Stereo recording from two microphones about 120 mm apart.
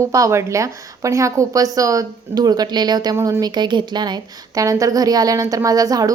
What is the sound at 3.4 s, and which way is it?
Speech, 40° right (ahead or behind).